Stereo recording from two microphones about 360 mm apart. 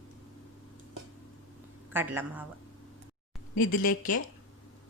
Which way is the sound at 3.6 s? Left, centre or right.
Left.